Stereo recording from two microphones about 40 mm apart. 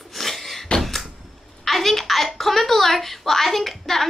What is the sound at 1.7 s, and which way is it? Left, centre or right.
A woman's voice, centre.